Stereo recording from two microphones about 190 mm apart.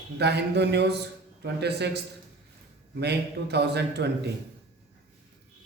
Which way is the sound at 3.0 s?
60° right (ahead or behind).